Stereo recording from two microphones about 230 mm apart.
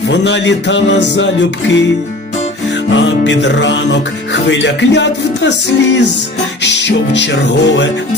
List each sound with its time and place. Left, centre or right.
0.1 s music: left
2.9 s music: left